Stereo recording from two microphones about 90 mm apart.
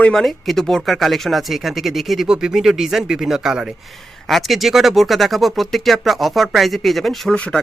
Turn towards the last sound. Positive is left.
turn(degrees=0)  # may be behind; listen again after turning